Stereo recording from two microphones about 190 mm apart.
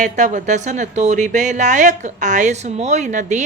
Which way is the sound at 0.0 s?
40° right (ahead or behind).